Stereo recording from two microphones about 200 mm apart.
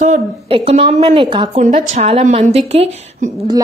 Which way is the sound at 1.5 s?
40° right (ahead or behind).